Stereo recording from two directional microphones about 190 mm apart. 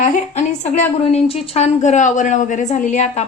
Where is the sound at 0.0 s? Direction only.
35° left (ahead or behind).